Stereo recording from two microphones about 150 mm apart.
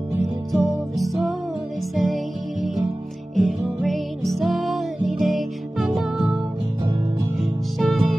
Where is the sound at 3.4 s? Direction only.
Centre (ahead or behind).